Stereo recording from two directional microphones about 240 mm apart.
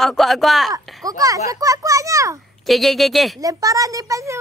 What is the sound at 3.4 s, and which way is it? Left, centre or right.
A child's voice, centre.